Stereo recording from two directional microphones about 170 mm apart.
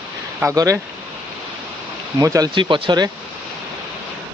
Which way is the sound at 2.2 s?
20° right (ahead or behind).